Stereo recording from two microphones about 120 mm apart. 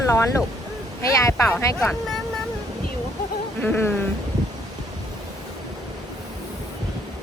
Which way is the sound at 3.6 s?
15° left (ahead or behind).